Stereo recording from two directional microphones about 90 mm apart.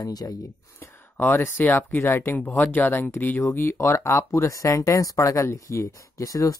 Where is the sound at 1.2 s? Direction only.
25° left (ahead or behind).